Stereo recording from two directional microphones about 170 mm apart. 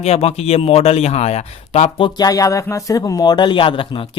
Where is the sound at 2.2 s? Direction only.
20° left (ahead or behind).